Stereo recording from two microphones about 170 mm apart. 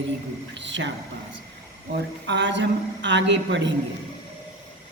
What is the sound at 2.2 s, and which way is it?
A woman's voice, 90° right.